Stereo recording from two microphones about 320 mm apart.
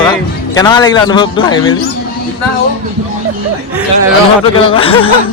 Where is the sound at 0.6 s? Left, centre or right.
Centre.